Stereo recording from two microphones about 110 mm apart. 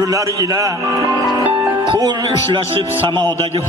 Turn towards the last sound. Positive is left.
turn(degrees=-45)  # may be behind; listen again after turning